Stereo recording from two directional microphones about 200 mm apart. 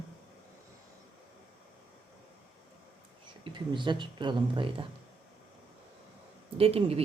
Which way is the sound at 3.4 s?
25° right (ahead or behind).